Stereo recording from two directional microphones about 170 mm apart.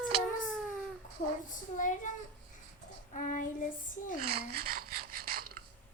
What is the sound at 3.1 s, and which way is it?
Speech, 50° left (ahead or behind).